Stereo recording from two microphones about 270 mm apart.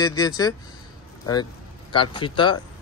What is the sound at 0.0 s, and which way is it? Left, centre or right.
A man's voice, centre.